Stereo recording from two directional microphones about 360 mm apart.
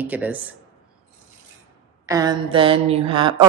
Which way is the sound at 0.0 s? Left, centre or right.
Centre.